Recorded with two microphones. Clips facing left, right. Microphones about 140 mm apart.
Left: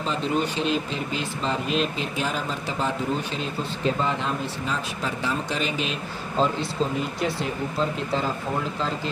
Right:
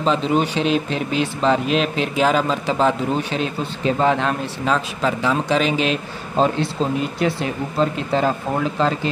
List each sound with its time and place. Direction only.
0.0 s speech: 90° right; by 6.7 s 65° right (ahead or behind)
7.8 s speech: 70° right (ahead or behind)